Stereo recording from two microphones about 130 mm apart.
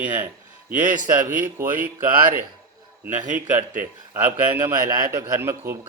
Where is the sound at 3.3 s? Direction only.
15° right (ahead or behind).